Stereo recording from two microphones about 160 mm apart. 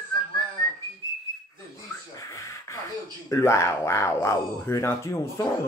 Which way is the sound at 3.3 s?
15° left (ahead or behind).